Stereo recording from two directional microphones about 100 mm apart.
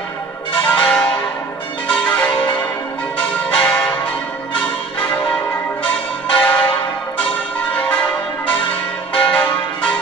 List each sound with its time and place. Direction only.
0.7 s change ringing: 15° left (ahead or behind)
4.9 s church bell: 15° left (ahead or behind)
9.1 s church bell: 15° left (ahead or behind)